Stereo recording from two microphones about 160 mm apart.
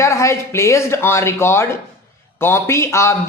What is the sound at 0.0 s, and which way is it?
Speech, 20° left (ahead or behind).